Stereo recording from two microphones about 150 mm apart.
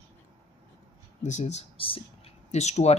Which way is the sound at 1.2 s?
50° left (ahead or behind).